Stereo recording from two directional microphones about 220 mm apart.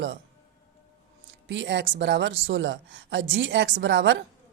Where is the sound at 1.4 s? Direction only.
55° right (ahead or behind).